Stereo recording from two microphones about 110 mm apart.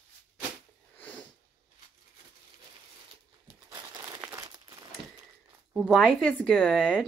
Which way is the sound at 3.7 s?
30° right (ahead or behind).